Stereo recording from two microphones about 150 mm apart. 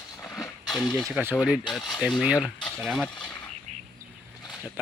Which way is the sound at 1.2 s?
15° right (ahead or behind).